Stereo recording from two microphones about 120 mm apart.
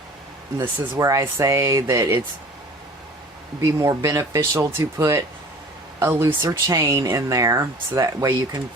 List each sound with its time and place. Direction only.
0.6 s speech: 25° right (ahead or behind)
3.6 s speech: 25° right (ahead or behind)